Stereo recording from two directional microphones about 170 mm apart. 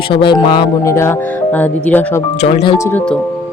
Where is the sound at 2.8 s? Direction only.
10° left (ahead or behind).